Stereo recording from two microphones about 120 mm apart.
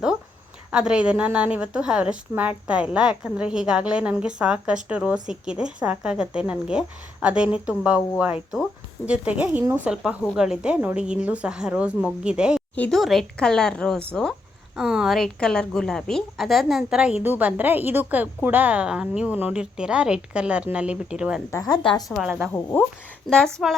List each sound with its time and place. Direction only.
0.7 s a woman's voice: 5° right (ahead or behind)
9.9 s a woman's voice: 5° right (ahead or behind)
14.8 s a woman's voice: 5° right (ahead or behind)
21.5 s a woman's voice: 35° left (ahead or behind)
22.1 s a woman's voice: 5° right (ahead or behind)
22.5 s speech: 15° left (ahead or behind)
23.3 s a woman's voice: centre (ahead or behind)